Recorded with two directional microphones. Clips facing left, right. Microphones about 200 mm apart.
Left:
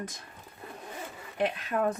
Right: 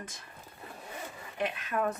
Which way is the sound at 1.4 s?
35° left (ahead or behind).